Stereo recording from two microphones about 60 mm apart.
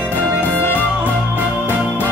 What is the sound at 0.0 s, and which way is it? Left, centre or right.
Music, right.